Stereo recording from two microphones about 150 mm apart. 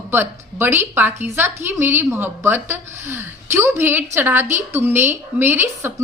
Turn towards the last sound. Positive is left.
turn(degrees=-15)  # may be behind; listen again after turning